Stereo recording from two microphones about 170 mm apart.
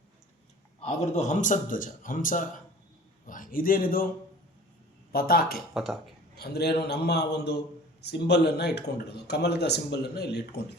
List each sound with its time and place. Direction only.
0.8 s a man's voice: 40° left (ahead or behind); by 4.1 s 55° left (ahead or behind)
5.1 s speech: 60° left (ahead or behind)
5.7 s speech: centre (ahead or behind)
6.3 s a man's voice: 70° left (ahead or behind)